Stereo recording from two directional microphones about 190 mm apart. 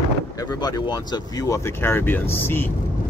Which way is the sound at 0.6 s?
20° left (ahead or behind).